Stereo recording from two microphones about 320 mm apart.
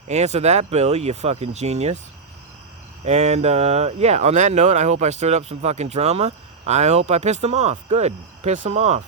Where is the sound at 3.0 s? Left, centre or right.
Centre.